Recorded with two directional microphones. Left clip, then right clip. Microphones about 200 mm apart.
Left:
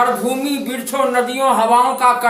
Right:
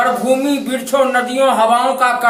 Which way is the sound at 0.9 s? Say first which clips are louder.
Right 4 dB; 5° right (ahead or behind).